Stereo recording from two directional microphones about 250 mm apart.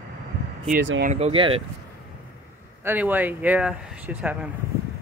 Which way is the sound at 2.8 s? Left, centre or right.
Centre.